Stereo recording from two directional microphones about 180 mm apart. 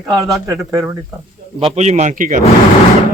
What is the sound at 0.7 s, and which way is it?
Speech, 15° right (ahead or behind).